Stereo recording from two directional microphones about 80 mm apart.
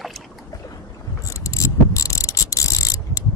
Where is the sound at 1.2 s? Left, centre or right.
Left.